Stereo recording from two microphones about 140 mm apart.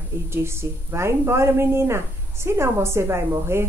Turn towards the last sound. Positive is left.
turn(degrees=-20)  # may be behind; listen again after turning